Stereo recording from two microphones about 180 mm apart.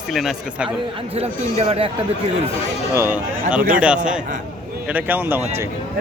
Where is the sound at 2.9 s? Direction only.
15° right (ahead or behind).